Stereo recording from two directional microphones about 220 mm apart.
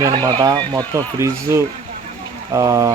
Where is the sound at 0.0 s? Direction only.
20° right (ahead or behind).